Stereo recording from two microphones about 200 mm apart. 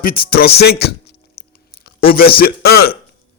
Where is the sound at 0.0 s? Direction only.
45° left (ahead or behind).